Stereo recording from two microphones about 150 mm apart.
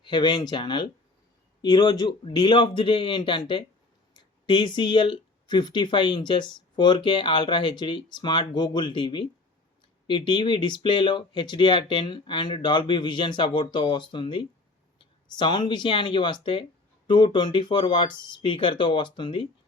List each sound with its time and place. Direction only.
0.0 s speech: 30° left (ahead or behind)